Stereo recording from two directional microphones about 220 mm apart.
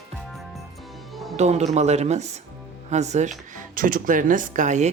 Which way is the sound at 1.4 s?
30° right (ahead or behind).